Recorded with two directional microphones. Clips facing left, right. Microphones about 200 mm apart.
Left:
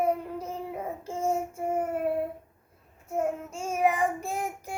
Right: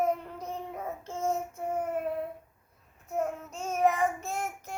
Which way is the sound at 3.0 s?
10° left (ahead or behind).